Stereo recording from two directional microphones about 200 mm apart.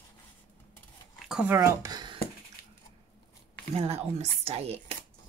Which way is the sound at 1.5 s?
15° right (ahead or behind).